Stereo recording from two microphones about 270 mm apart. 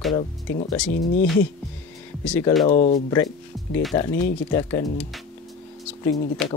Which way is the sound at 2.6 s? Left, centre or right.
Left.